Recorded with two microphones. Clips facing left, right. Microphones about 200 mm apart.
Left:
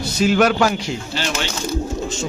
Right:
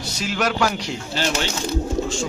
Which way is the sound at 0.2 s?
55° left (ahead or behind).